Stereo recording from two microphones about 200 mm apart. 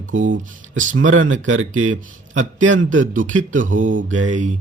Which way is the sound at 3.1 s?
40° right (ahead or behind).